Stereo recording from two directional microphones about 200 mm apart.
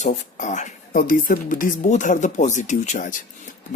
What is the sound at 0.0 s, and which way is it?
Speech, 40° left (ahead or behind).